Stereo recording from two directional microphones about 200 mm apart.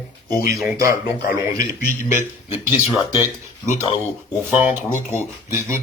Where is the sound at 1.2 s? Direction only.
45° left (ahead or behind).